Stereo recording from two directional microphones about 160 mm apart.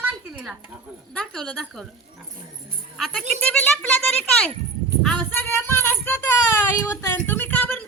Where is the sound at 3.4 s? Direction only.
5° left (ahead or behind).